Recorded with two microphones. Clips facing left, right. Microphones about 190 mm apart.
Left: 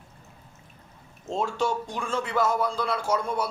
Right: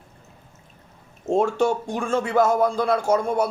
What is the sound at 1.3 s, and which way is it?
A man's voice, 55° right (ahead or behind).